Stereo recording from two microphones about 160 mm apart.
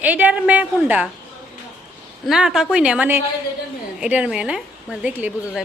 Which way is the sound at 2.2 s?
5° right (ahead or behind).